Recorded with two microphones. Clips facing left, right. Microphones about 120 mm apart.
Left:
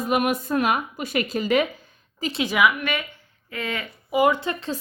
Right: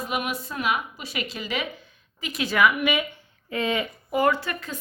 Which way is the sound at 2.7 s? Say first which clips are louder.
Right 3 dB; 10° right (ahead or behind).